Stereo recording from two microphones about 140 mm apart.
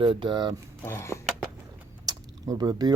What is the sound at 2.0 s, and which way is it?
Typing, 25° right (ahead or behind).